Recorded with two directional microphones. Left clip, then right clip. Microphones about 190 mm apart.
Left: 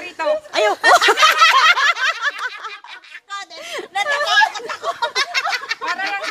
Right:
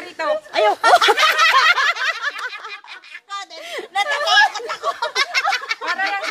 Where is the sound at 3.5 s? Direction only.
20° left (ahead or behind).